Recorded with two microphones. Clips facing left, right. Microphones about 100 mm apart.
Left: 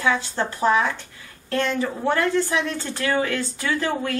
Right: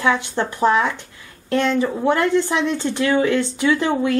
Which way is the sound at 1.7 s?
15° right (ahead or behind).